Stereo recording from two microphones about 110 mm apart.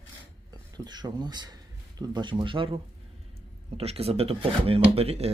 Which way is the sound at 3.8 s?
65° right (ahead or behind).